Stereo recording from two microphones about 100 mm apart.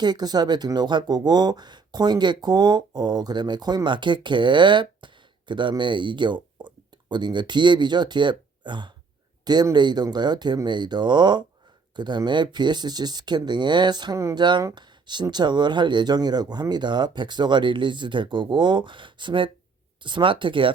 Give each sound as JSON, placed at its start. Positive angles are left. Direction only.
{"t": 0.0, "sound": "speech", "side_deg": -45}